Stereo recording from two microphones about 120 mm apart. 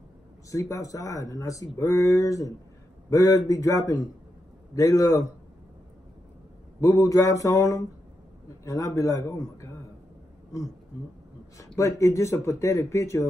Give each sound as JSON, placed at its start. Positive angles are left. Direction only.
{"t": 0.5, "sound": "speech", "side_deg": 25}
{"t": 6.8, "sound": "speech", "side_deg": 25}
{"t": 11.5, "sound": "speech", "side_deg": 25}